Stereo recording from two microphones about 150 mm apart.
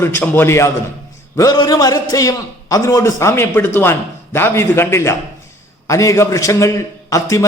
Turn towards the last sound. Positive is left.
turn(degrees=20)  # may be behind; listen again after turning